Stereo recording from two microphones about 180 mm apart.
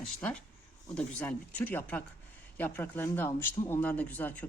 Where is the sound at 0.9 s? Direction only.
10° left (ahead or behind).